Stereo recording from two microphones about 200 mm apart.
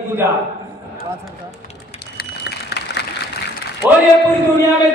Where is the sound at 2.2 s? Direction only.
55° left (ahead or behind).